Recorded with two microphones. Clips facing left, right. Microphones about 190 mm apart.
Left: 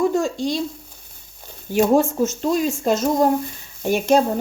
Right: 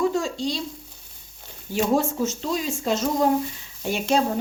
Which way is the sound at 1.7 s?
50° left (ahead or behind).